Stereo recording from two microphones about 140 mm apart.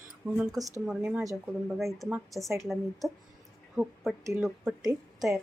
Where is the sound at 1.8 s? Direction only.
Centre (ahead or behind).